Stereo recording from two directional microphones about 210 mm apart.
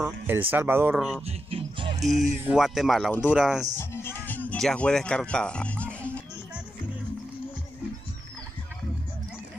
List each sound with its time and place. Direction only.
0.0 s speech: 10° right (ahead or behind)
1.2 s music: 25° right (ahead or behind)
2.2 s speech: 10° right (ahead or behind)
3.7 s music: 10° left (ahead or behind)